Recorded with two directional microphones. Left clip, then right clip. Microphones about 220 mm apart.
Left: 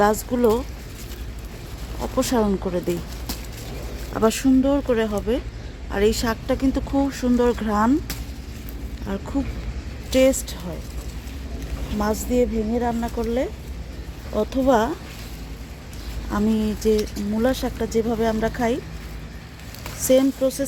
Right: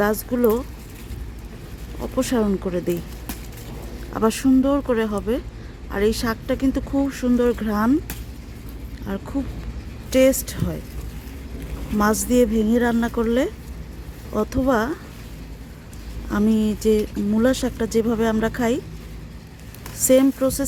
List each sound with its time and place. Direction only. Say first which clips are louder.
0.0 s speech: left 1 dB; 5° right (ahead or behind)
2.0 s speech: left 1 dB; 5° right (ahead or behind)
4.1 s speech: even; 5° right (ahead or behind)
9.0 s speech: left 1 dB; 5° right (ahead or behind)
12.3 s speech: right 2 dB; 20° right (ahead or behind); by 14.9 s 5° right (ahead or behind)
16.3 s speech: right 2 dB; 10° right (ahead or behind)
20.0 s speech: right 1 dB; 15° right (ahead or behind)